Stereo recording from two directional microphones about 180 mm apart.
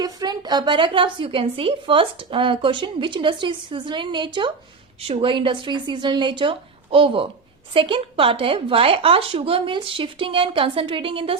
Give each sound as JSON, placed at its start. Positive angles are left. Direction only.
{"t": 0.0, "sound": "a woman's voice", "side_deg": -25}